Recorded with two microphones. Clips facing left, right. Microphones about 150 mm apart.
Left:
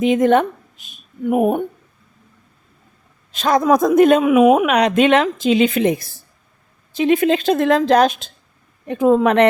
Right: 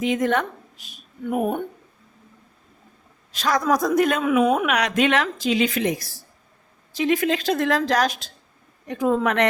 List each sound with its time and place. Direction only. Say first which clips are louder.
0.0 s a woman's voice: left 8 dB; 20° left (ahead or behind)
3.3 s a woman's voice: left 6 dB; 25° left (ahead or behind)
4.6 s a woman's voice: left 6 dB; 25° left (ahead or behind)